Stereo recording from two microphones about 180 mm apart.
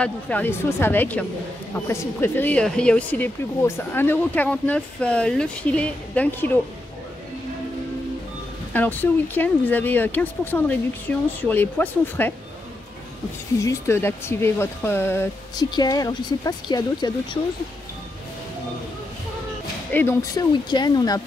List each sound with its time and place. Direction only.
0.0 s speech: 10° left (ahead or behind)
8.7 s speech: 10° left (ahead or behind)
13.6 s speech: 15° left (ahead or behind)
19.9 s speech: 10° left (ahead or behind)